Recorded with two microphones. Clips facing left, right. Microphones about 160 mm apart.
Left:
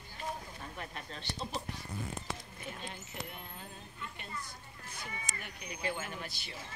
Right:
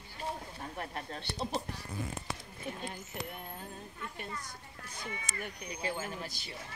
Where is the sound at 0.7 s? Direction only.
45° right (ahead or behind).